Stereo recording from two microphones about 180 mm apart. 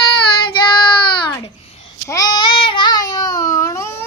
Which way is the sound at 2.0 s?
20° left (ahead or behind).